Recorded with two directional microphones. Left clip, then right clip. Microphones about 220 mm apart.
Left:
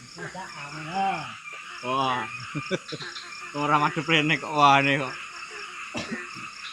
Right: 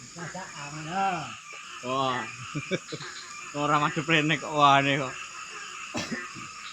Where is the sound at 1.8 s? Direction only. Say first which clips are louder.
Left 2 dB; 30° left (ahead or behind).